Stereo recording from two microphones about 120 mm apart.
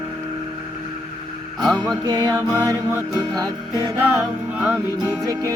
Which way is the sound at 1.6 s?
5° left (ahead or behind).